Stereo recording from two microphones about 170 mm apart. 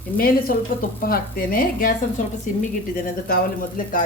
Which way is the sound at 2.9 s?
55° left (ahead or behind).